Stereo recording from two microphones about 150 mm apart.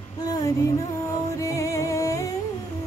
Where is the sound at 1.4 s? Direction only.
20° left (ahead or behind).